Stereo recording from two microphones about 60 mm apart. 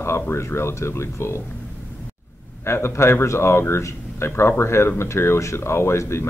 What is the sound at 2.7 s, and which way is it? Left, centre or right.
A man's voice, left.